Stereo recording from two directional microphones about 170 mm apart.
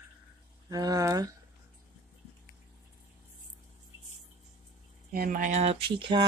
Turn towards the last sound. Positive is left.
turn(degrees=-30)  # may be behind; listen again after turning